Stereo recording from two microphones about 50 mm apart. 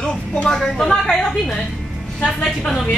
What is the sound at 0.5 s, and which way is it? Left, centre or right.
Speech, centre.